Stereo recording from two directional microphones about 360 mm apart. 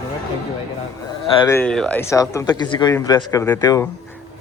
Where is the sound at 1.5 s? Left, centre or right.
Centre.